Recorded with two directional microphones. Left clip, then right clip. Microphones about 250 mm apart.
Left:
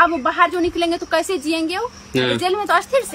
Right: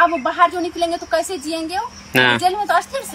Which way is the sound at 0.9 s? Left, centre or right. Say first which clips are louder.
Left 1 dB; left.